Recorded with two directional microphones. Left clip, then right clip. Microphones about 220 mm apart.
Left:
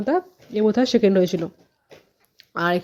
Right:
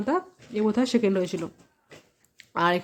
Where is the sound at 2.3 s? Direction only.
10° left (ahead or behind).